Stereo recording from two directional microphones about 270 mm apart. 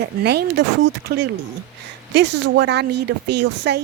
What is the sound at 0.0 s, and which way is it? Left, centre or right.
Speech, right.